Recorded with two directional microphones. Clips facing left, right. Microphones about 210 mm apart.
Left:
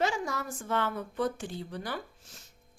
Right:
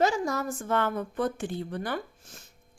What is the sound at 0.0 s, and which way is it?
A woman's voice, 40° right (ahead or behind).